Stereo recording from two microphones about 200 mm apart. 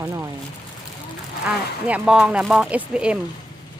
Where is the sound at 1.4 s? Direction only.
5° right (ahead or behind).